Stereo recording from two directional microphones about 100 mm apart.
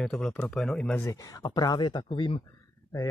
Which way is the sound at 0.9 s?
30° left (ahead or behind).